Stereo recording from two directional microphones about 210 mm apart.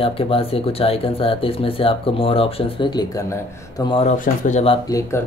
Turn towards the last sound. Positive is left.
turn(degrees=15)  # may be behind; listen again after turning